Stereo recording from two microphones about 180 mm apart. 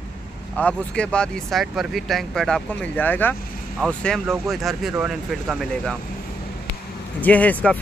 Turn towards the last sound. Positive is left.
turn(degrees=10)  # may be behind; listen again after turning